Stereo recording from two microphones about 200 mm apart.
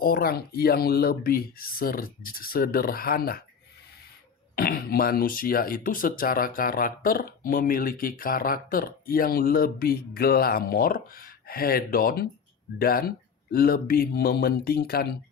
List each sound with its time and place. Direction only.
0.0 s speech: 45° left (ahead or behind)
4.5 s speech: 50° left (ahead or behind)